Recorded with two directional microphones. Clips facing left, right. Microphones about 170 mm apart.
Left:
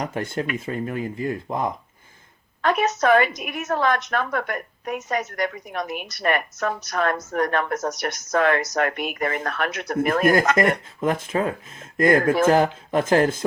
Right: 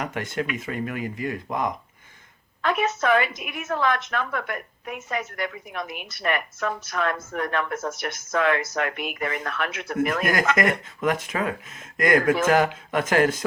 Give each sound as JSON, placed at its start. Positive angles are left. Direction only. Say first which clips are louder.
{"t": 0.0, "sound": "a woman's voice", "louder": "left 2 dB", "side_deg": 30}
{"t": 2.6, "sound": "a woman's voice", "louder": "left 3 dB", "side_deg": 40}
{"t": 10.3, "sound": "a woman's voice", "louder": "left 3 dB", "side_deg": 30}